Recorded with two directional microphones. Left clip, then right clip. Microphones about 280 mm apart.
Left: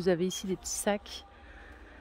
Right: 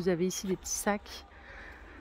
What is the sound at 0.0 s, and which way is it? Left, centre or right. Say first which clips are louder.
Speech: left 2 dB; centre.